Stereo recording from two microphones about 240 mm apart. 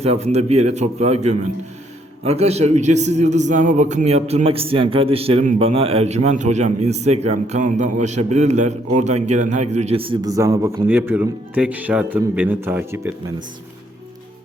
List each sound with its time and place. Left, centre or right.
0.0 s a man's voice: right; by 13.3 s centre